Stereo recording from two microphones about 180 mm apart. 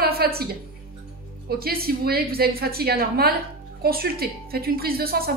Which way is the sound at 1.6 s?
60° right (ahead or behind).